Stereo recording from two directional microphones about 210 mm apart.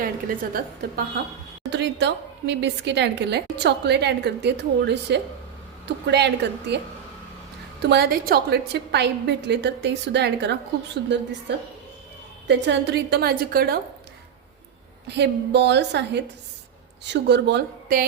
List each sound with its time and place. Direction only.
0.0 s a woman's voice: 40° right (ahead or behind)
1.7 s a woman's voice: 55° right (ahead or behind)
7.8 s a woman's voice: 50° right (ahead or behind)
15.0 s a woman's voice: 55° right (ahead or behind)